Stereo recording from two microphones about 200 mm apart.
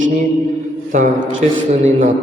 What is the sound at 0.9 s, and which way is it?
A man's voice, 35° right (ahead or behind).